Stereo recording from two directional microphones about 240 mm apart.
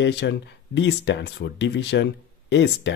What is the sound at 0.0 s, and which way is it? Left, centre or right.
Speech, left.